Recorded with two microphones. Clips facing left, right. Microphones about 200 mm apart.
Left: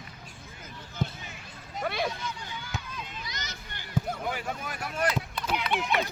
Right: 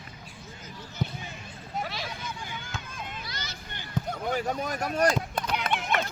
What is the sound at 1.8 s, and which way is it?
Vehicle, 55° left (ahead or behind).